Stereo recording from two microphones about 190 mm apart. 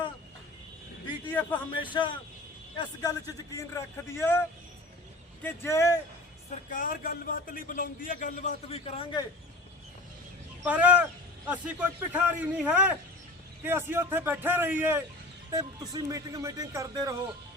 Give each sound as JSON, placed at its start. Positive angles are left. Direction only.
{"t": 1.3, "sound": "a man's voice", "side_deg": 10}
{"t": 1.7, "sound": "a man's voice", "side_deg": 25}
{"t": 6.7, "sound": "a man's voice", "side_deg": 45}
{"t": 10.6, "sound": "speech", "side_deg": -10}